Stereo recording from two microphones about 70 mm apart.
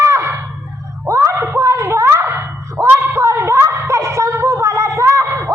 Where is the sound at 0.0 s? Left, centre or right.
Right.